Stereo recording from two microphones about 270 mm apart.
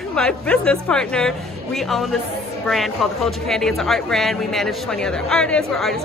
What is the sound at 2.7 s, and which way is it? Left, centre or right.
Speech, centre.